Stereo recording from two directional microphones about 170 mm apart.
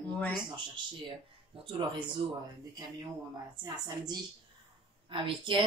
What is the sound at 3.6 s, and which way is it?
Speech, 25° right (ahead or behind).